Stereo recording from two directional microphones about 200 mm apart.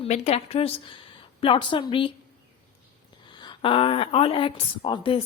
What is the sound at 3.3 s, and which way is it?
A woman's voice, 25° left (ahead or behind).